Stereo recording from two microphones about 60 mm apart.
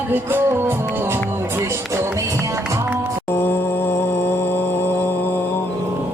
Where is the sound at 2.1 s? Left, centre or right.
Right.